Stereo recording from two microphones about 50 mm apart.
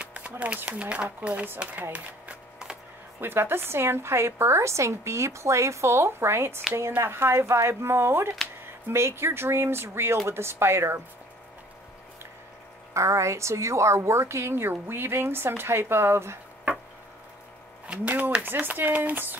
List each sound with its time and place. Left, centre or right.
0.0 s a sound: right
0.7 s speech: right
3.2 s a woman's voice: right
12.9 s a woman's voice: right
14.5 s speech: right
17.8 s speech: right